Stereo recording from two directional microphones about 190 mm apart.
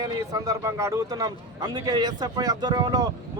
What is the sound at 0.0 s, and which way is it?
Speech, 20° right (ahead or behind).